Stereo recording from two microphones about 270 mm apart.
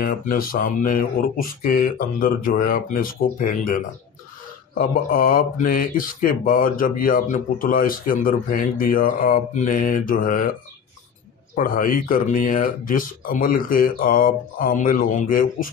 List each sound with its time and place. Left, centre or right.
0.0 s speech: left
4.7 s speech: left
11.5 s speech: left